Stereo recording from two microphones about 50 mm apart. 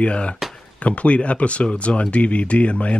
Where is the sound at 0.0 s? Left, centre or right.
Left.